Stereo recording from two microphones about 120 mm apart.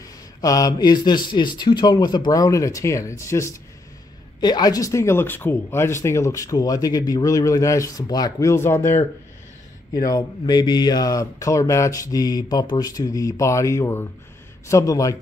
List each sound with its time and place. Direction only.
0.0 s speech: 30° left (ahead or behind)
4.4 s speech: 35° left (ahead or behind)
9.9 s speech: 35° left (ahead or behind)